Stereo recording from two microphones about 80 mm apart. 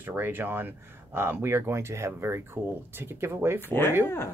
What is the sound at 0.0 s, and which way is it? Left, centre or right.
Speech, right.